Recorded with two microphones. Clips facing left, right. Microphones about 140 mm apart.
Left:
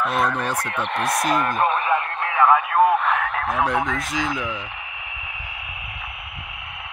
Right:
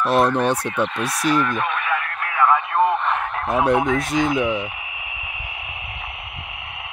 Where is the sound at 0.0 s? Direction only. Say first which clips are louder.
Right 5 dB; 75° right (ahead or behind).